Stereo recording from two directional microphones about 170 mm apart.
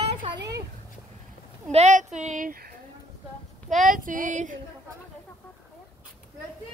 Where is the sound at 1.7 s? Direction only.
45° right (ahead or behind).